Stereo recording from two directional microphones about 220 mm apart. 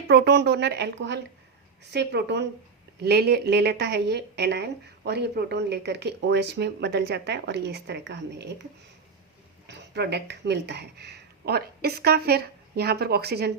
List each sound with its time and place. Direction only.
0.1 s a woman's voice: 50° right (ahead or behind)
9.6 s speech: 50° right (ahead or behind)